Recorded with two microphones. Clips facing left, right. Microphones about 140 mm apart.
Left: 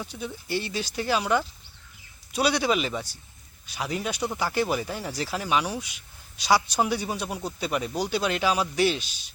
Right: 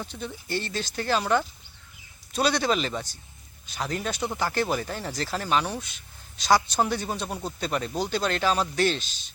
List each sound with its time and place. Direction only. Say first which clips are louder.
0.0 s speech: left 1 dB; 10° left (ahead or behind)